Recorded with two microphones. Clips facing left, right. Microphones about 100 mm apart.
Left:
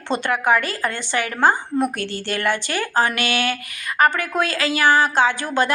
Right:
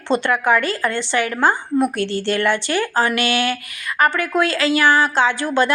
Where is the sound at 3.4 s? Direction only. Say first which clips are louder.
Right 2 dB; 20° left (ahead or behind).